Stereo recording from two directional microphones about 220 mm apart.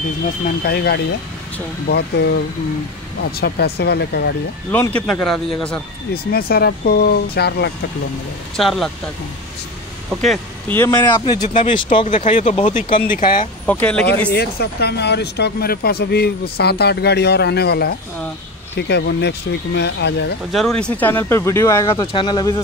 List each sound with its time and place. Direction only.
0.7 s speech: 45° left (ahead or behind)
4.6 s a man's voice: 10° left (ahead or behind)
6.3 s speech: 45° left (ahead or behind)
8.5 s a man's voice: centre (ahead or behind)
10.8 s speech: 20° left (ahead or behind)
11.4 s speech: 35° left (ahead or behind)
11.7 s speech: 25° left (ahead or behind)
13.7 s a man's voice: 5° left (ahead or behind)
14.3 s speech: 45° left (ahead or behind)
20.5 s speech: 5° left (ahead or behind); by 22.6 s 20° left (ahead or behind)